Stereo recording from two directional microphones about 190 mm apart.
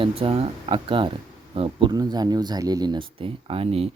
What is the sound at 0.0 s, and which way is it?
Speech, 30° right (ahead or behind).